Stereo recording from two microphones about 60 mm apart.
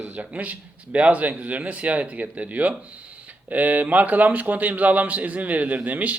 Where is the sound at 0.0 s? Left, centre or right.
Right.